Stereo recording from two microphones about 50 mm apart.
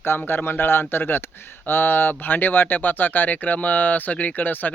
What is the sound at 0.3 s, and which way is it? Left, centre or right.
Speech, left.